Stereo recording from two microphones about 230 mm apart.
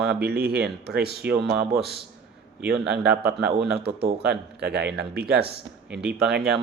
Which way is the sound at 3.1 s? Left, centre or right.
Right.